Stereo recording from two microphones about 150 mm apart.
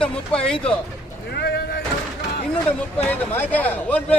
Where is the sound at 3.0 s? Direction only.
10° left (ahead or behind).